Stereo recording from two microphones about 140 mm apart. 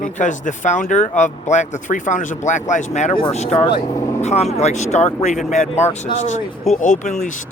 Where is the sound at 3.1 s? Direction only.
35° left (ahead or behind).